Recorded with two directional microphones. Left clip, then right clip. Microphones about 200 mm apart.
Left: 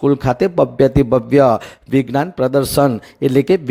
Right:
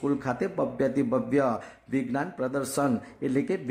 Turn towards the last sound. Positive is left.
turn(degrees=40)  # may be behind; listen again after turning